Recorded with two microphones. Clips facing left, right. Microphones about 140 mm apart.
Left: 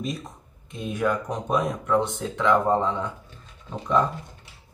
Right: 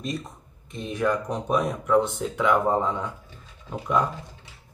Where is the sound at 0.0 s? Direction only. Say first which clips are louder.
Even; centre (ahead or behind).